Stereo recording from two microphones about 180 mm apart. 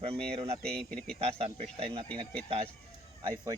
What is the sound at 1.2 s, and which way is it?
Speech, 35° right (ahead or behind).